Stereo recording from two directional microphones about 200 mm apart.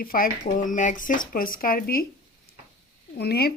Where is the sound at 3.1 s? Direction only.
55° left (ahead or behind).